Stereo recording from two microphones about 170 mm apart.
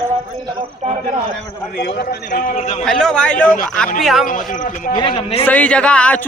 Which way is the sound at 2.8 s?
5° left (ahead or behind).